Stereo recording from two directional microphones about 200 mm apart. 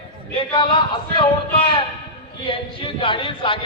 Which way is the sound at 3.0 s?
25° left (ahead or behind).